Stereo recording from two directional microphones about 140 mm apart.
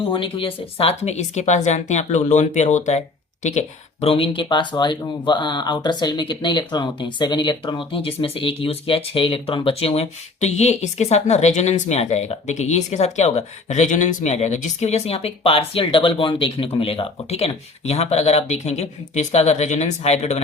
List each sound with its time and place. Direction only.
0.0 s speech: 40° left (ahead or behind)